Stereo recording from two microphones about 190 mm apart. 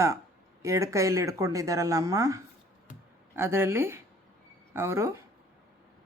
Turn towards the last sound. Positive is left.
turn(degrees=-15)  # may be behind; listen again after turning